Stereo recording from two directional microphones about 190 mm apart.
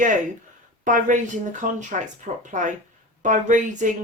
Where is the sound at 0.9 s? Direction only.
45° right (ahead or behind).